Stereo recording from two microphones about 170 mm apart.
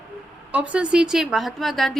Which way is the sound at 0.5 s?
5° right (ahead or behind).